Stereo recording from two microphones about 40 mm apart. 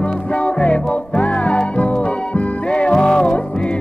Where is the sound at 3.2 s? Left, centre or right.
Left.